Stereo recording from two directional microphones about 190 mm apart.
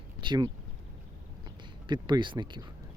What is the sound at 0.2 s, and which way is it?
Speech, 25° right (ahead or behind).